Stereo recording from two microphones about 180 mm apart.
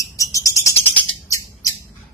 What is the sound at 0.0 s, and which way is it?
Bird, 20° left (ahead or behind).